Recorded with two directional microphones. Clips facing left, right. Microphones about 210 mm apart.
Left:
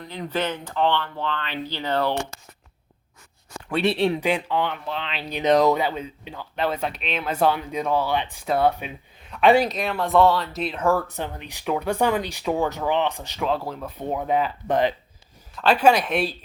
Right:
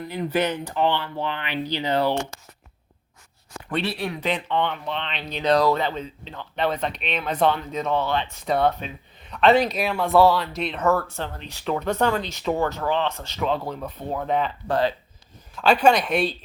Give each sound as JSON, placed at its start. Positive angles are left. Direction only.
{"t": 0.0, "sound": "speech", "side_deg": -10}
{"t": 3.8, "sound": "speech", "side_deg": 25}
{"t": 4.2, "sound": "speech", "side_deg": 10}
{"t": 5.4, "sound": "speech", "side_deg": 20}
{"t": 13.4, "sound": "speech", "side_deg": 0}
{"t": 14.0, "sound": "speech", "side_deg": 15}
{"t": 14.7, "sound": "speech", "side_deg": 20}
{"t": 15.5, "sound": "speech", "side_deg": 0}